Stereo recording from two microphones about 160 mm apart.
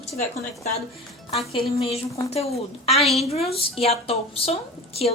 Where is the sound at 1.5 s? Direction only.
40° left (ahead or behind).